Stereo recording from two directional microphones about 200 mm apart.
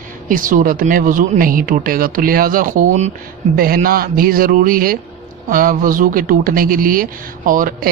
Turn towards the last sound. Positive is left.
turn(degrees=-45)  # may be behind; listen again after turning